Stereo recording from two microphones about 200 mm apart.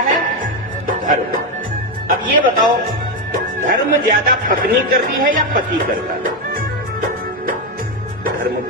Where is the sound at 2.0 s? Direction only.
45° right (ahead or behind).